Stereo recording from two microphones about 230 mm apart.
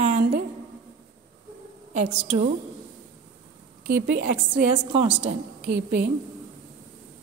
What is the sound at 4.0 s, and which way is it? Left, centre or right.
Speech, right.